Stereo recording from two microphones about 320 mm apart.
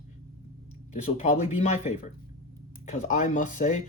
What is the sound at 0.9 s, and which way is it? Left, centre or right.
Speech, left.